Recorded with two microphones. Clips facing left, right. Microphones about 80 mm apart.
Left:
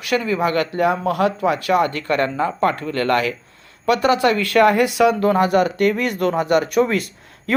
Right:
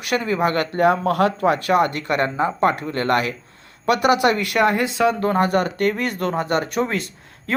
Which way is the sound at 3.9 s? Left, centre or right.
Centre.